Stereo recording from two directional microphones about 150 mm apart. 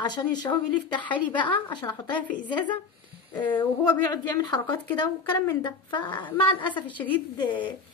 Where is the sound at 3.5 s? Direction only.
10° left (ahead or behind).